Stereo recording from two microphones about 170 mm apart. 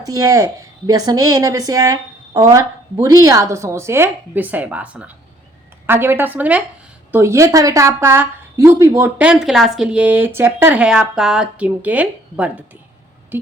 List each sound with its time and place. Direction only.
0.0 s a woman's voice: 20° right (ahead or behind)